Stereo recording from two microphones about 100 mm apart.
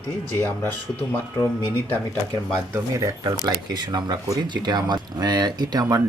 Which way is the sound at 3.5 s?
50° right (ahead or behind).